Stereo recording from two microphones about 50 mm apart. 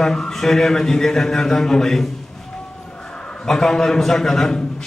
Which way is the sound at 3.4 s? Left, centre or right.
Centre.